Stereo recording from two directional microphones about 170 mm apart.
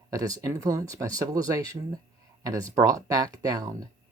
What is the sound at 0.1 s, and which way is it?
Speech, 20° right (ahead or behind).